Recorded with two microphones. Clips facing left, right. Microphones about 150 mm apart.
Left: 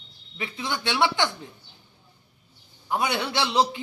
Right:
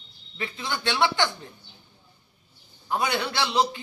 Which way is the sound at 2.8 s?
15° left (ahead or behind).